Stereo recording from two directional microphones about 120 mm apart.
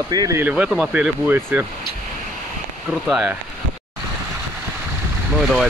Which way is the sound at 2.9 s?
5° right (ahead or behind).